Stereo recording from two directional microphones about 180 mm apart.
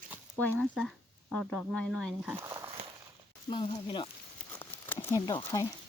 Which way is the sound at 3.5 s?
25° left (ahead or behind).